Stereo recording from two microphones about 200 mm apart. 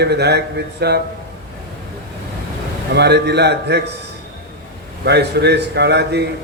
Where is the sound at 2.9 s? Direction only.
55° right (ahead or behind).